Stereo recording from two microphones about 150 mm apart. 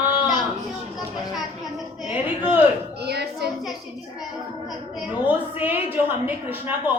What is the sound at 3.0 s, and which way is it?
Speech, 90° right.